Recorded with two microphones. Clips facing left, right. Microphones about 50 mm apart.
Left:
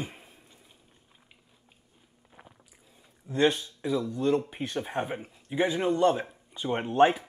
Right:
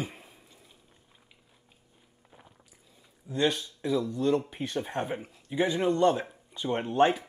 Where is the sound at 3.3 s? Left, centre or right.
Left.